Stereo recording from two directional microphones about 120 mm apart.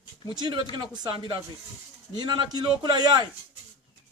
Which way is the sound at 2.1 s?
35° right (ahead or behind).